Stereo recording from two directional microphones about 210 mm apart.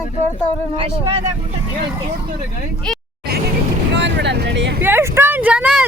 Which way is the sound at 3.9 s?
55° right (ahead or behind).